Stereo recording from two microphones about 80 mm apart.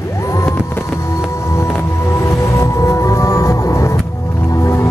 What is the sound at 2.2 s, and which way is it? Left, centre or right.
Music, left.